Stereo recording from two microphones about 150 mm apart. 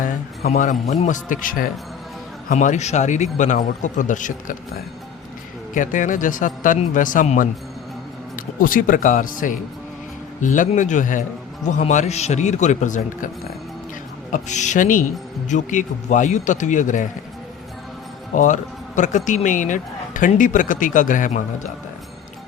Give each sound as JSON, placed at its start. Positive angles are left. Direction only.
{"t": 0.4, "sound": "speech", "side_deg": 55}
{"t": 2.5, "sound": "speech", "side_deg": 50}
{"t": 5.7, "sound": "speech", "side_deg": 60}
{"t": 8.5, "sound": "a man's voice", "side_deg": 65}
{"t": 14.3, "sound": "speech", "side_deg": 50}
{"t": 18.3, "sound": "speech", "side_deg": 55}